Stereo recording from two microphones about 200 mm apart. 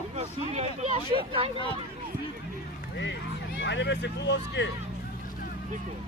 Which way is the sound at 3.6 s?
60° left (ahead or behind).